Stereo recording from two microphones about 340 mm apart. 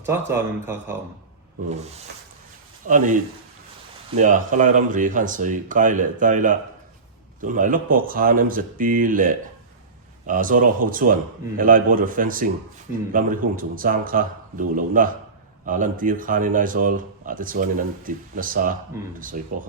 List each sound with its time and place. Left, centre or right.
0.0 s speech: centre
2.8 s speech: right
4.2 s speech: right